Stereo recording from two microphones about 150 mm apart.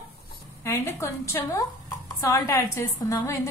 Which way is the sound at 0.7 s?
20° left (ahead or behind).